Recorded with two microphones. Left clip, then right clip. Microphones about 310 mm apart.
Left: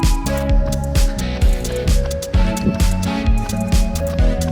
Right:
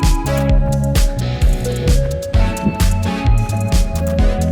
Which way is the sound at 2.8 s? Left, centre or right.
Centre.